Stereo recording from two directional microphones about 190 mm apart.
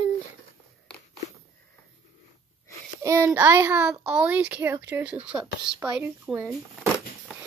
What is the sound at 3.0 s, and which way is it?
A child's voice, 15° right (ahead or behind).